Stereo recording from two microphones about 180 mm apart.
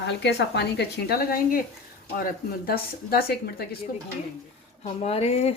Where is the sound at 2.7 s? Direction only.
60° left (ahead or behind).